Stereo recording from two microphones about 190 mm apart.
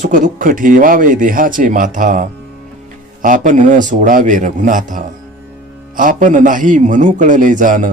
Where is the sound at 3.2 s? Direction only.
45° right (ahead or behind).